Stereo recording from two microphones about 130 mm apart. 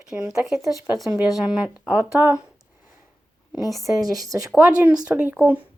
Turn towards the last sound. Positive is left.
turn(degrees=-15)  # may be behind; listen again after turning